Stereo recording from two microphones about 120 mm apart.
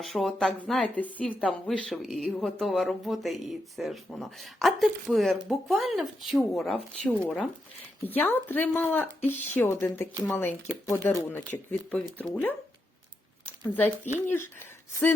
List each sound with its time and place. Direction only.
0.0 s speech: centre (ahead or behind); by 14.5 s 20° left (ahead or behind)